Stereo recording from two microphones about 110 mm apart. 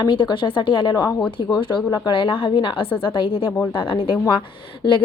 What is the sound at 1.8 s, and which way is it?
Speech, 35° left (ahead or behind).